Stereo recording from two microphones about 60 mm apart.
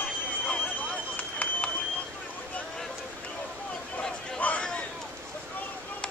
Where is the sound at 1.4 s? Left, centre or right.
Left.